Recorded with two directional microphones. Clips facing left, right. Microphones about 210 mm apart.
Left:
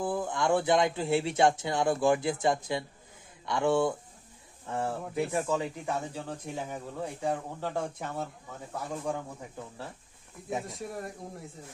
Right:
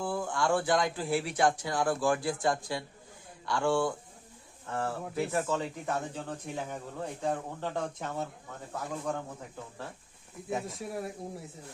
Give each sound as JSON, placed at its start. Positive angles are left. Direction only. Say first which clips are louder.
{"t": 0.0, "sound": "speech", "louder": "left 2 dB", "side_deg": 20}
{"t": 10.5, "sound": "speech", "louder": "even", "side_deg": 0}